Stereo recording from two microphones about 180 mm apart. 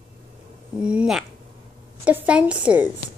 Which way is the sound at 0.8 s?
5° right (ahead or behind).